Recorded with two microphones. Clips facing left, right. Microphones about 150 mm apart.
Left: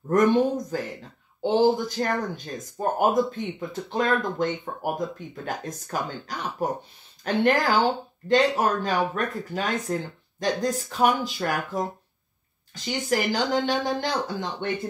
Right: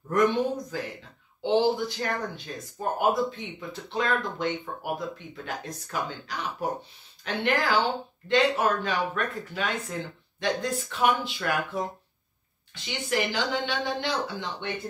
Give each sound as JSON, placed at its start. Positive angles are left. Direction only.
{"t": 0.1, "sound": "speech", "side_deg": 45}